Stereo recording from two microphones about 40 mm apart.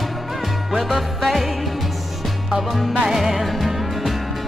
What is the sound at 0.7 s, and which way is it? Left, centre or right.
Music, centre.